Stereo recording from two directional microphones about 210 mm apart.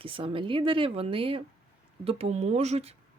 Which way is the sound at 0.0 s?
25° right (ahead or behind).